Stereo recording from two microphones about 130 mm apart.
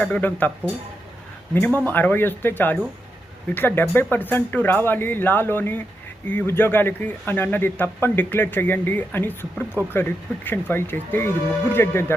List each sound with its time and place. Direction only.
0.1 s speech: 10° left (ahead or behind)